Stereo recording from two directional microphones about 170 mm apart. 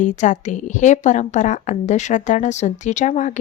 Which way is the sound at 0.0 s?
45° left (ahead or behind).